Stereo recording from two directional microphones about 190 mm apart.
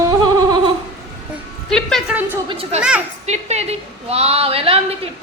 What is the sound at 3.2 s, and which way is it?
A woman's voice, 35° right (ahead or behind).